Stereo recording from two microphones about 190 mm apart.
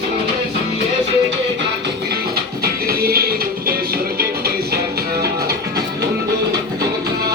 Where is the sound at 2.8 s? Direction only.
55° right (ahead or behind).